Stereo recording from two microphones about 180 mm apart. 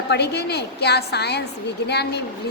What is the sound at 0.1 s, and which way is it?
A woman's voice, 65° left (ahead or behind).